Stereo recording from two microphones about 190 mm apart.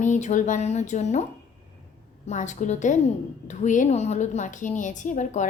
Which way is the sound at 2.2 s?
40° left (ahead or behind).